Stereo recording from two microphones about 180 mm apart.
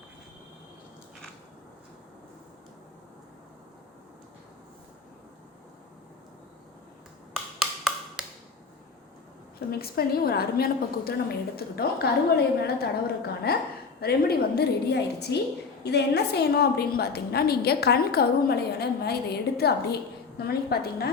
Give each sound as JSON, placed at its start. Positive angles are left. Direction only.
{"t": 7.6, "sound": "wood block", "side_deg": 0}
{"t": 9.7, "sound": "a woman's voice", "side_deg": 55}